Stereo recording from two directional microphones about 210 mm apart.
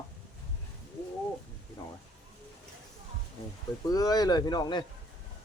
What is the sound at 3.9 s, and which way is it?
Speech, 20° left (ahead or behind).